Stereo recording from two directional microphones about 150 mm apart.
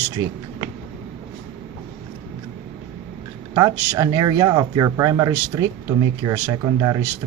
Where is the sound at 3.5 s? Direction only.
25° right (ahead or behind).